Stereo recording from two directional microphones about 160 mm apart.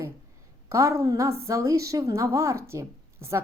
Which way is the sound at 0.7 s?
20° right (ahead or behind).